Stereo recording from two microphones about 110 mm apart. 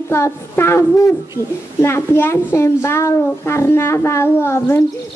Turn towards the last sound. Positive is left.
turn(degrees=20)  # may be behind; listen again after turning